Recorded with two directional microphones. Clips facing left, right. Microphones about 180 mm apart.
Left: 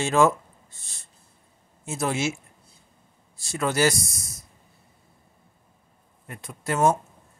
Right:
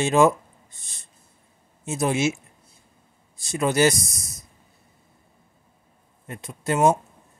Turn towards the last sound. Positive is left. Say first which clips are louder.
# right 2 dB
turn(degrees=-20)  # may be behind; listen again after turning